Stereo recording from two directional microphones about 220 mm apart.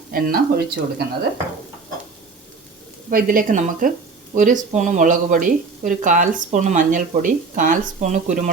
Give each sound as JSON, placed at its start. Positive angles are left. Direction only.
{"t": 0.1, "sound": "speech", "side_deg": -40}
{"t": 3.1, "sound": "speech", "side_deg": -40}